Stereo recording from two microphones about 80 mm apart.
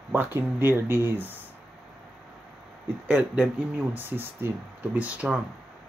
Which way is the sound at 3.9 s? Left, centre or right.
Right.